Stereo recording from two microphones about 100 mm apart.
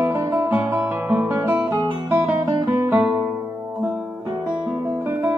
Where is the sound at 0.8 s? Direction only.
25° right (ahead or behind).